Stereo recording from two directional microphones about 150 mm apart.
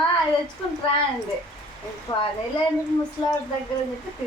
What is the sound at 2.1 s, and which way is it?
Speech, 30° left (ahead or behind).